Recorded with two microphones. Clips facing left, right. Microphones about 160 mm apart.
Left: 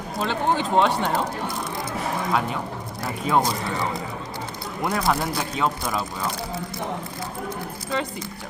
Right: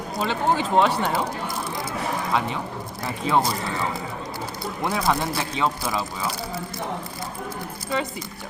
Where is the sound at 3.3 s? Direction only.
Centre (ahead or behind).